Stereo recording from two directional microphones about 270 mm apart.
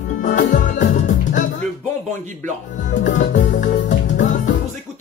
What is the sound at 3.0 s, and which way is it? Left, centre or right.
Music, left.